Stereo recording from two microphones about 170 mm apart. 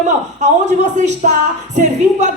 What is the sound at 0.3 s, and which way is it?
Speech, 45° right (ahead or behind).